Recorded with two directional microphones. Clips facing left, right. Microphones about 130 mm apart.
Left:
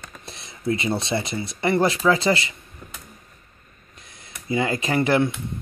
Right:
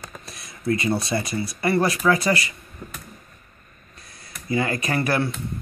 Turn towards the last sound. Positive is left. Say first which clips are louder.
# left 3 dB
turn(degrees=20)  # may be behind; listen again after turning